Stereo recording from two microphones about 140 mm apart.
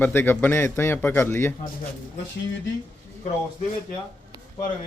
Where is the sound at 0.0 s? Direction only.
15° left (ahead or behind).